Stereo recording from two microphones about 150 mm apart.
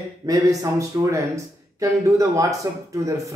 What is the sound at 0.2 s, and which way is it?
Speech, 25° right (ahead or behind).